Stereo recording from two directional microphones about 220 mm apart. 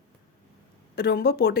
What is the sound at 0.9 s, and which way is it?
Speech, 45° left (ahead or behind).